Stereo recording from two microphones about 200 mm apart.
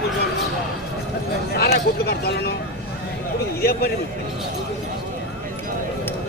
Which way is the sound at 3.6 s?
50° left (ahead or behind).